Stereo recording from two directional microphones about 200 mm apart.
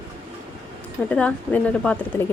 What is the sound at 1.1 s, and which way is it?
Speech, 5° left (ahead or behind).